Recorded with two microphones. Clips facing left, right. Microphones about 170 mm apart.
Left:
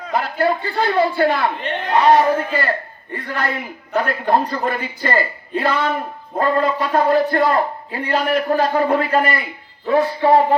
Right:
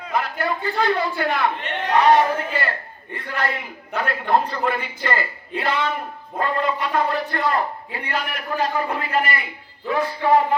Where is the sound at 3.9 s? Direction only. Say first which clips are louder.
Left 3 dB; 40° left (ahead or behind).